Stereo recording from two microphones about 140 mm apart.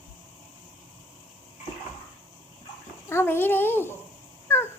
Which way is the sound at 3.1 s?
15° left (ahead or behind).